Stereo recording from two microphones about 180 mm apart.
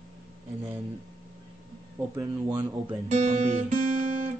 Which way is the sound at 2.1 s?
20° right (ahead or behind).